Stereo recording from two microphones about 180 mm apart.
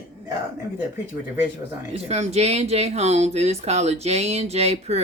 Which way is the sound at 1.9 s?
35° right (ahead or behind).